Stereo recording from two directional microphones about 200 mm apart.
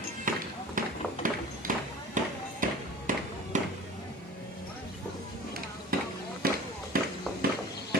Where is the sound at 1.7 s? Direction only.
45° right (ahead or behind).